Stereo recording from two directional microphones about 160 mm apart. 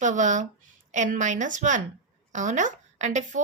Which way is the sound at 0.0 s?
50° right (ahead or behind).